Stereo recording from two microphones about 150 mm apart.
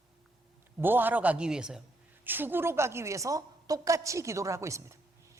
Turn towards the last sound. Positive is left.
turn(degrees=-20)  # may be behind; listen again after turning